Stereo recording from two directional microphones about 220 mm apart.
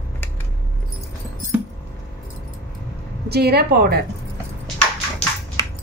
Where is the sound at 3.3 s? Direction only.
45° right (ahead or behind).